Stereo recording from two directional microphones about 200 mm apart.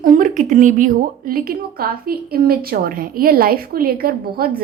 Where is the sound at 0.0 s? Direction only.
40° right (ahead or behind).